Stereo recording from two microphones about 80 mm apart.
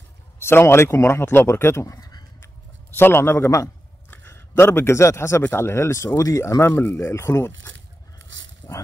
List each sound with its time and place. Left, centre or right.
0.4 s speech: left
2.0 s a sound: left
3.0 s a man's voice: left